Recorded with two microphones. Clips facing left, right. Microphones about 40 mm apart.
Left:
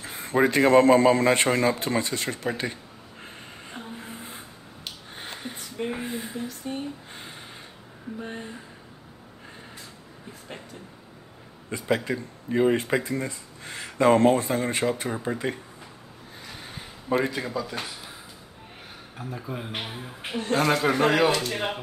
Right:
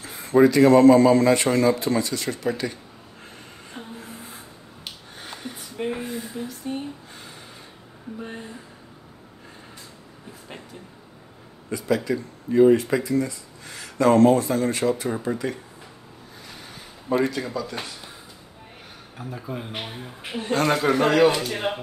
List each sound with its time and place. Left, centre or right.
0.0 s a man's voice: left
4.0 s a sound: left
5.6 s a sound: centre
6.0 s speech: left
6.3 s a man's voice: centre
11.7 s speech: left
17.3 s speech: centre
19.1 s a man's voice: centre